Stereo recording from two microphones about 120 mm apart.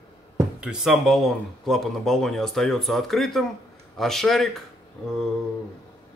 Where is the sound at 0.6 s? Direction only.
5° right (ahead or behind).